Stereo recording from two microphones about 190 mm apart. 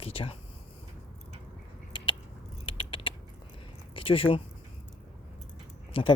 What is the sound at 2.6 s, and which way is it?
Typing, 30° left (ahead or behind).